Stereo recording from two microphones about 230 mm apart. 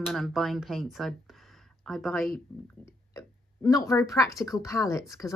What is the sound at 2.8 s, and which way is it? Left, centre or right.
Speech, centre.